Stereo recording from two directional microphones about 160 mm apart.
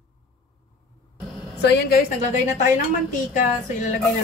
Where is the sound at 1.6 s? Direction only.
90° left.